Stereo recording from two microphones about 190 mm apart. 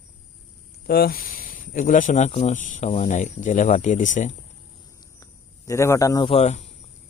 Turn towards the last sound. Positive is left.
turn(degrees=35)  # may be behind; listen again after turning